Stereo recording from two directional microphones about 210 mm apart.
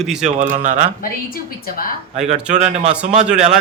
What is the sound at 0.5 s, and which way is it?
Speech, 35° right (ahead or behind).